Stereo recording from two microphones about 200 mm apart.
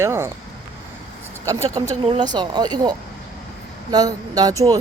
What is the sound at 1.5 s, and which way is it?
Speech, 15° right (ahead or behind).